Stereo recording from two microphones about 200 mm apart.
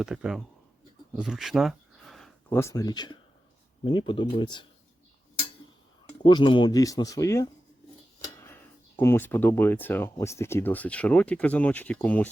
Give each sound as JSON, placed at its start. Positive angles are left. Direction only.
{"t": 0.0, "sound": "speech", "side_deg": -5}
{"t": 1.1, "sound": "a sound", "side_deg": -5}
{"t": 2.6, "sound": "speech", "side_deg": 15}
{"t": 6.2, "sound": "speech", "side_deg": 25}